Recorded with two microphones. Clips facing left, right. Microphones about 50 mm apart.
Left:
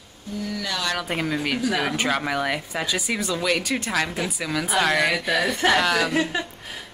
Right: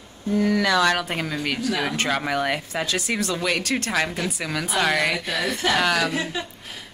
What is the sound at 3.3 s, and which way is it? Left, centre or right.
Speech, centre.